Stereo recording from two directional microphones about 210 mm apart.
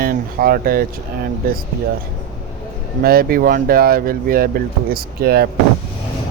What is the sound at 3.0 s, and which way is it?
Speech, 45° right (ahead or behind).